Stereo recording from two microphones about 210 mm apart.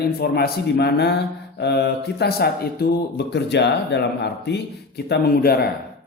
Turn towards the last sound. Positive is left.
turn(degrees=50)  # may be behind; listen again after turning